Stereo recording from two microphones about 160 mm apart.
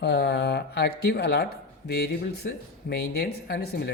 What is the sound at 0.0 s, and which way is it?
Speech, 90° left.